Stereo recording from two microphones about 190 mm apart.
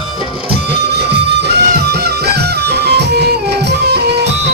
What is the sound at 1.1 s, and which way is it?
Music, 60° right (ahead or behind).